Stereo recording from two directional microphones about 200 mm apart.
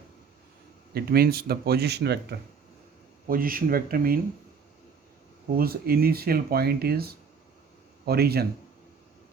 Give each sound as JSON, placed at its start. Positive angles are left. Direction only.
{"t": 0.9, "sound": "speech", "side_deg": -50}
{"t": 3.2, "sound": "speech", "side_deg": -45}
{"t": 5.5, "sound": "speech", "side_deg": -50}